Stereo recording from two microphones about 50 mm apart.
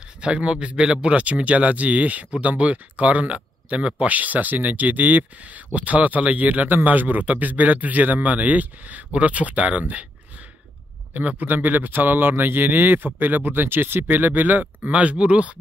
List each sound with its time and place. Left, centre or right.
0.2 s speech: right